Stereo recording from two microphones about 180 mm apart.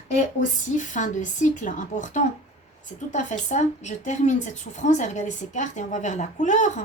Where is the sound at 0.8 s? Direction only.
45° left (ahead or behind).